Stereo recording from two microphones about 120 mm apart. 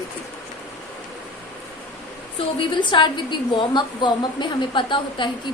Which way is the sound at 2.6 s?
40° left (ahead or behind).